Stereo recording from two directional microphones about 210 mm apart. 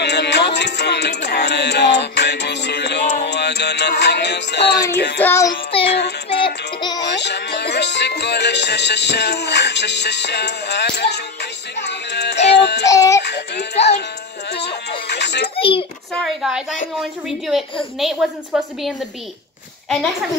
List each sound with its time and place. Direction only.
0.0 s music: 55° left (ahead or behind)
5.2 s a sound: 10° left (ahead or behind)
5.9 s child singing: 55° left (ahead or behind)
6.4 s child singing: 20° left (ahead or behind)
7.0 s music: 55° left (ahead or behind)
12.8 s a sound: 15° left (ahead or behind)
13.2 s speech: 55° left (ahead or behind)
14.5 s baby cry: 55° left (ahead or behind)
15.5 s a sound: 25° left (ahead or behind)
16.1 s a woman's voice: centre (ahead or behind)
17.9 s a woman's voice: centre (ahead or behind)